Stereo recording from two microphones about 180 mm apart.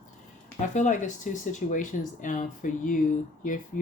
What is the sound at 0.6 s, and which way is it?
Speech, 45° left (ahead or behind).